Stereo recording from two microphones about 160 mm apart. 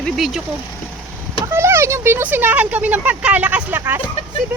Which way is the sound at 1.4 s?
15° right (ahead or behind).